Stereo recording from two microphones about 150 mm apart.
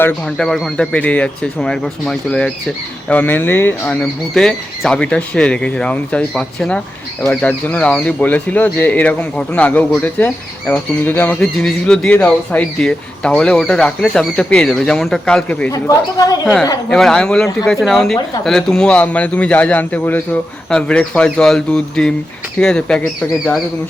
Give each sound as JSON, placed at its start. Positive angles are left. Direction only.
{"t": 0.0, "sound": "speech", "side_deg": 5}
{"t": 15.7, "sound": "speech", "side_deg": 25}
{"t": 16.9, "sound": "speech", "side_deg": 5}